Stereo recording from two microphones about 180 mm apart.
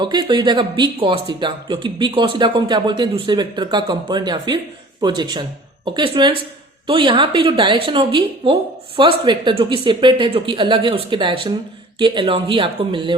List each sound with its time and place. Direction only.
0.0 s speech: 25° right (ahead or behind)